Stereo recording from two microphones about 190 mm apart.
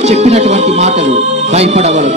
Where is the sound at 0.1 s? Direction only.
35° right (ahead or behind).